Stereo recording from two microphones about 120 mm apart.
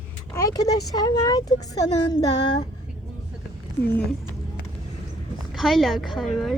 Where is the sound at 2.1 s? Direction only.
50° left (ahead or behind).